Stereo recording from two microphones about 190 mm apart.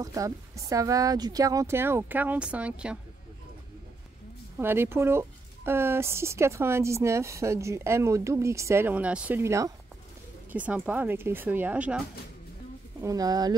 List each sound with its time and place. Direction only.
0.0 s speech: 15° right (ahead or behind)
4.6 s speech: 10° right (ahead or behind)
13.0 s speech: 20° right (ahead or behind)